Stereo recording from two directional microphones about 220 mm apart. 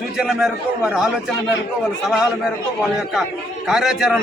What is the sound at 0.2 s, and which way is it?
Speech, centre (ahead or behind).